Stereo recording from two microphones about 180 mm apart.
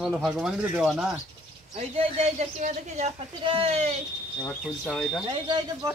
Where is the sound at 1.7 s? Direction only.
35° right (ahead or behind).